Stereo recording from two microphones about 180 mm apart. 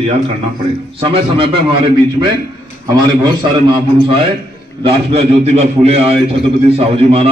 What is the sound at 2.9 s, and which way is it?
A man's voice, 25° right (ahead or behind).